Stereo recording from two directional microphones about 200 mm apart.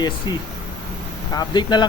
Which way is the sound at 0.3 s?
20° left (ahead or behind).